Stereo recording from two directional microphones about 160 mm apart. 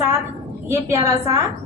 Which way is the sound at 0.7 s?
20° right (ahead or behind).